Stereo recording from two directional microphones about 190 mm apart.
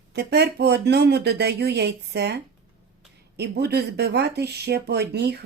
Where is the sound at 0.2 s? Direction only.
60° right (ahead or behind).